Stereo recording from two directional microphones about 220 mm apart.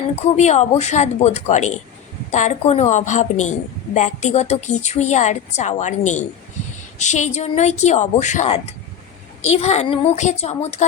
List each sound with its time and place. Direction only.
0.3 s a woman's voice: 30° left (ahead or behind)